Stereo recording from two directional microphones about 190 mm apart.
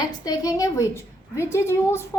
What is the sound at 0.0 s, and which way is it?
A woman's voice, 20° left (ahead or behind).